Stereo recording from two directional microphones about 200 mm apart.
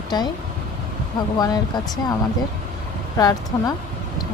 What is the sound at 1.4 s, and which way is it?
Speech, 20° left (ahead or behind).